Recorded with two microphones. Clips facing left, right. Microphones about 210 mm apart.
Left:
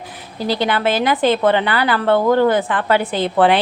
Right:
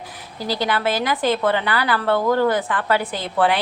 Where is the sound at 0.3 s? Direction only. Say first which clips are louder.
Left 4 dB; 25° left (ahead or behind).